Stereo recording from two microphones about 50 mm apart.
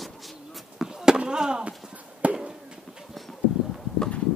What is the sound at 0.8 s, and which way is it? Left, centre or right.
Chop, centre.